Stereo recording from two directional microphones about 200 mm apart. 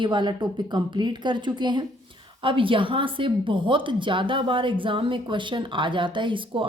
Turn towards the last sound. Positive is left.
turn(degrees=-25)  # may be behind; listen again after turning